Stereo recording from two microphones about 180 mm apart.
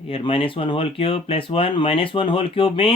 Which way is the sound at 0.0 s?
30° left (ahead or behind).